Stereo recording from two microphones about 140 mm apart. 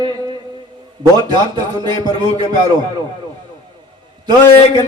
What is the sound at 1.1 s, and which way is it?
A man's voice, 30° right (ahead or behind).